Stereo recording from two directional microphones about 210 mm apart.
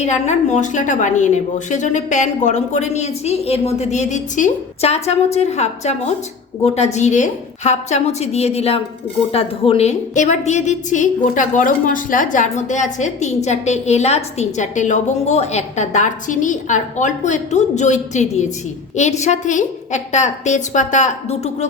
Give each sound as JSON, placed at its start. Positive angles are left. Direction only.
{"t": 0.0, "sound": "a woman's voice", "side_deg": 35}